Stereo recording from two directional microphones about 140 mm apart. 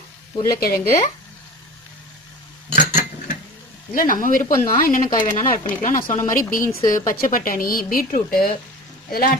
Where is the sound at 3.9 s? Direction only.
75° left (ahead or behind).